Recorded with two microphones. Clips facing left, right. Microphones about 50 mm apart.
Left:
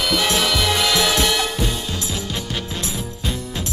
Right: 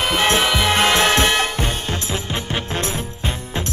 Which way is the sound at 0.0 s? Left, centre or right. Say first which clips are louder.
Right 2 dB; right.